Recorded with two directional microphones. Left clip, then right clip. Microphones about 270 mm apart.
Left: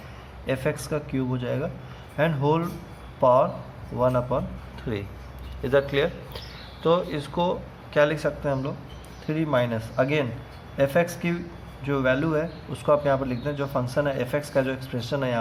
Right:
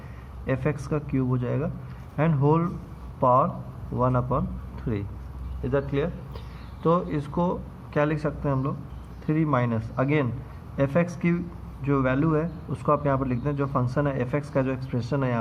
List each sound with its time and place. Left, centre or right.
0.4 s a man's voice: centre